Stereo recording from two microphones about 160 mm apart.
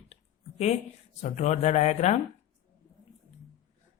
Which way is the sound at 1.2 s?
45° left (ahead or behind).